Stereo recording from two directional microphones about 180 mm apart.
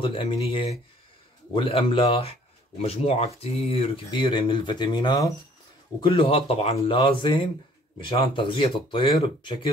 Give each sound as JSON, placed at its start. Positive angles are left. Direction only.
{"t": 0.0, "sound": "speech", "side_deg": 30}